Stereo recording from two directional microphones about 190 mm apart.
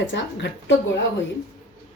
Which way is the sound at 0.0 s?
70° left (ahead or behind).